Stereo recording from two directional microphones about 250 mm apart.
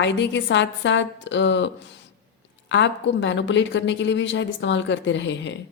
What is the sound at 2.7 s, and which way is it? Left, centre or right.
A woman's voice, left.